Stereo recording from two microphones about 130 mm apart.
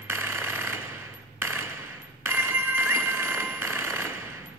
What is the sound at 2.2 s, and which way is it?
Telephone bell ringing, 15° right (ahead or behind).